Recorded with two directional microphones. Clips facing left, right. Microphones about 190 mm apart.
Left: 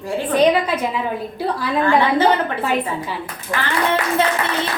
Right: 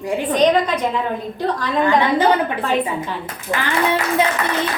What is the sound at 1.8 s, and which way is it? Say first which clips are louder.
Speech: even; 15° right (ahead or behind).